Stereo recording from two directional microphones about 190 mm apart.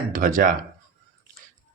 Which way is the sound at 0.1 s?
45° right (ahead or behind).